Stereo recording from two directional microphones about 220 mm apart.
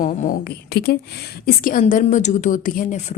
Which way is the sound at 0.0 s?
35° left (ahead or behind).